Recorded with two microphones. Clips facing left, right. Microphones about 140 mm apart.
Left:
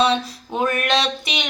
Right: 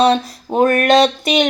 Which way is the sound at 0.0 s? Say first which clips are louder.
Right 5 dB; 45° right (ahead or behind).